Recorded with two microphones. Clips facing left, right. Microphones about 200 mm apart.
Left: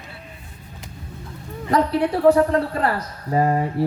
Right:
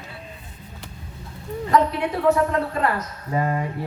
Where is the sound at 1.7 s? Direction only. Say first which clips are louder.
Left 2 dB; 35° left (ahead or behind).